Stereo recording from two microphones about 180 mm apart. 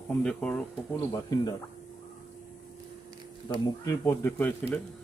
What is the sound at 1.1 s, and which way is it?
Speech, 20° left (ahead or behind).